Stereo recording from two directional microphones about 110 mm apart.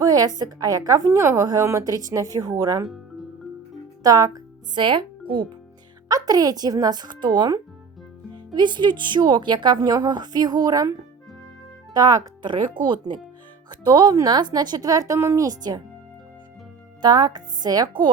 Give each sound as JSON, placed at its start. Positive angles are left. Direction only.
{"t": 0.0, "sound": "a woman's voice", "side_deg": -35}
{"t": 2.8, "sound": "music", "side_deg": 0}
{"t": 4.0, "sound": "speech", "side_deg": -30}
{"t": 4.7, "sound": "speech", "side_deg": -45}
{"t": 6.1, "sound": "a woman's voice", "side_deg": -35}
{"t": 11.9, "sound": "speech", "side_deg": -35}
{"t": 12.5, "sound": "a woman's voice", "side_deg": -45}
{"t": 17.0, "sound": "a woman's voice", "side_deg": -40}